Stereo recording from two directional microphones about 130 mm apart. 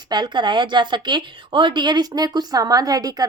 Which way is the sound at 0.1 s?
35° right (ahead or behind).